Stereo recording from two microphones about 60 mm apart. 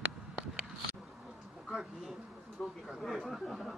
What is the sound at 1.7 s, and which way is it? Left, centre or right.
Speech, centre.